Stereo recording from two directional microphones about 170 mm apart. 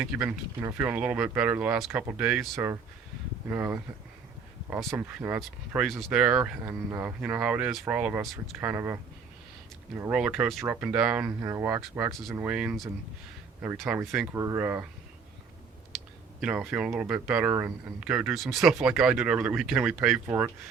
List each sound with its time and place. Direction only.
0.0 s speech: 10° right (ahead or behind)
4.9 s speech: 10° right (ahead or behind)
10.0 s speech: 5° right (ahead or behind)
13.8 s speech: 15° right (ahead or behind)
16.4 s speech: 10° right (ahead or behind)